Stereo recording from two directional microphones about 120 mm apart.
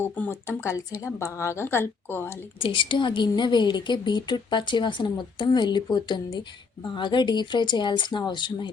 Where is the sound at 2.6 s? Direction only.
45° left (ahead or behind).